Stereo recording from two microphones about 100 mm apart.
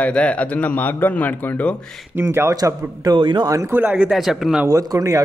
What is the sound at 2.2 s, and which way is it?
Speech, 25° right (ahead or behind).